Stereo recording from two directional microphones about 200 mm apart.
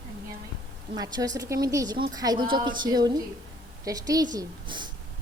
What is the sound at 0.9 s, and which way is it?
A woman's voice, 20° right (ahead or behind).